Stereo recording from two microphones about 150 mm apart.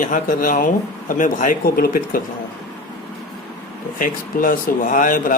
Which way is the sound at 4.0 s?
65° left (ahead or behind).